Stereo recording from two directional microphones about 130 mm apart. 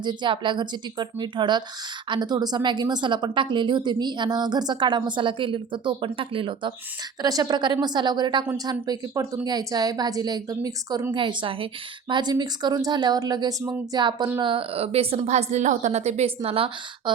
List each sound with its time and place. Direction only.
0.0 s a woman's voice: 35° right (ahead or behind)
7.2 s a woman's voice: 30° right (ahead or behind)
14.4 s a woman's voice: 45° right (ahead or behind)